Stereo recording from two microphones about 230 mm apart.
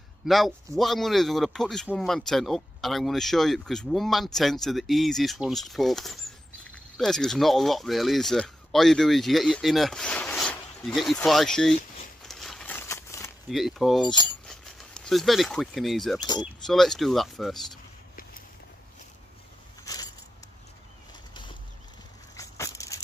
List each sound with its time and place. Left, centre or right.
0.2 s speech: centre
12.2 s a sound: centre
13.5 s speech: centre
14.0 s speech: centre
14.5 s speech: centre
16.2 s speech: centre
16.6 s speech: centre
19.8 s a sound: centre
21.3 s a sound: left